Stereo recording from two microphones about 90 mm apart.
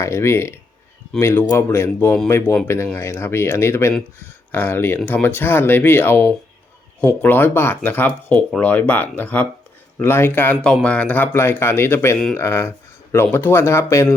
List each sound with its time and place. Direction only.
0.0 s speech: 30° left (ahead or behind)